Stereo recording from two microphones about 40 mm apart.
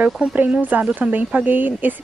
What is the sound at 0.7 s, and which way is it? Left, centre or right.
Speech, right.